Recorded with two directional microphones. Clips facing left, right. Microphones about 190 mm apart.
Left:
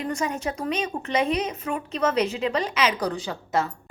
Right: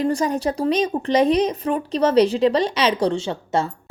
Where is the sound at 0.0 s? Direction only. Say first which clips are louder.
Right 7 dB; 35° right (ahead or behind).